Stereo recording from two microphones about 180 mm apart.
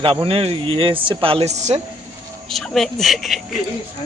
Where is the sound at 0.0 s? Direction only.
30° right (ahead or behind).